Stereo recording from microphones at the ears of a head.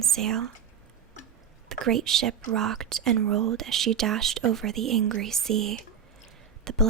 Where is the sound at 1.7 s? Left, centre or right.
Right.